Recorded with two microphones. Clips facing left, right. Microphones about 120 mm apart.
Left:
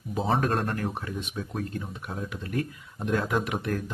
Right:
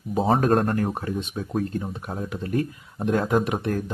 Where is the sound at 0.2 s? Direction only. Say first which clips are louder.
Right 6 dB; 40° right (ahead or behind).